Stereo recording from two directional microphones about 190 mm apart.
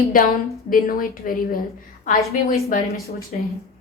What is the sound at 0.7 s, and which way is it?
A woman's voice, 50° left (ahead or behind).